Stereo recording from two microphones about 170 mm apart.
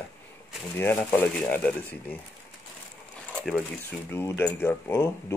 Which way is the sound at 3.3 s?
5° left (ahead or behind).